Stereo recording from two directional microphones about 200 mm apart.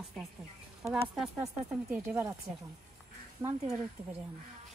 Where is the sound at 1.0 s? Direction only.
Centre (ahead or behind).